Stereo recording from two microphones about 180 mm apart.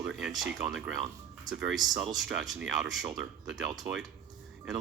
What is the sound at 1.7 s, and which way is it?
Speech, 20° right (ahead or behind).